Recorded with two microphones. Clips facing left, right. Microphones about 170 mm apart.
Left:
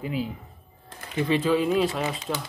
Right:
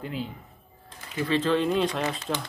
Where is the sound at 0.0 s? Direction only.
5° left (ahead or behind).